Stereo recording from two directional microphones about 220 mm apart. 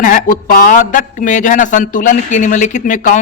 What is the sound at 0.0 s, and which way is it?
Speech, 40° left (ahead or behind).